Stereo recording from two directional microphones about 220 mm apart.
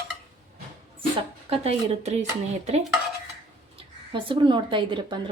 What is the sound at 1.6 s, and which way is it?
Speech, 30° right (ahead or behind).